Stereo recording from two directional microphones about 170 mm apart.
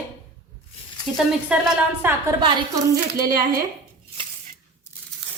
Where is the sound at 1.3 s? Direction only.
5° right (ahead or behind).